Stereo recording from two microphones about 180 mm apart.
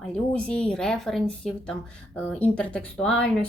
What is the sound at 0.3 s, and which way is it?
Speech, 5° left (ahead or behind).